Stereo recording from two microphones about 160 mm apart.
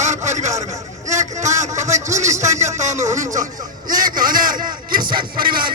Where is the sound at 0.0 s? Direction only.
45° right (ahead or behind).